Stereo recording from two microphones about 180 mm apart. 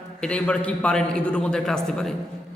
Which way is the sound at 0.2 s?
5° left (ahead or behind).